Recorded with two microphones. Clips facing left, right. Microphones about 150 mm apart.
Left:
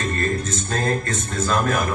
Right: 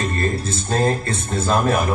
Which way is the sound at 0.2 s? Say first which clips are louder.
Right 1 dB; 30° right (ahead or behind).